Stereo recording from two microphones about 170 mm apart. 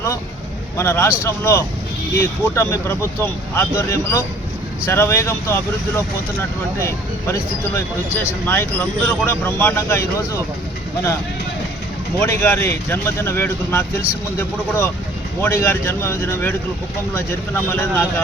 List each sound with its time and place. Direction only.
0.8 s speech: 15° left (ahead or behind)
12.2 s speech: 15° left (ahead or behind)
17.7 s speech: 15° left (ahead or behind)